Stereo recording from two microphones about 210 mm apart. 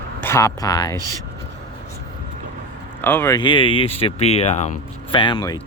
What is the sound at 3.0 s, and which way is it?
Speech, 10° left (ahead or behind).